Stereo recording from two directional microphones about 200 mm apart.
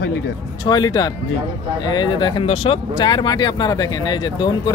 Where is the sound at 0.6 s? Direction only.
20° left (ahead or behind).